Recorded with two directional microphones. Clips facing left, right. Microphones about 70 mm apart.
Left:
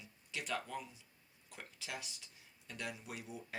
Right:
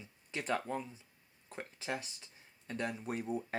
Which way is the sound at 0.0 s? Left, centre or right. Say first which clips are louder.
Right 5 dB; right.